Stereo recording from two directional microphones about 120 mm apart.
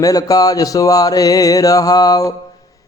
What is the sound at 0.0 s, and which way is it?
Speech, 30° left (ahead or behind).